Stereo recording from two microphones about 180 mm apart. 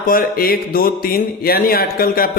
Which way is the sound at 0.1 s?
55° left (ahead or behind).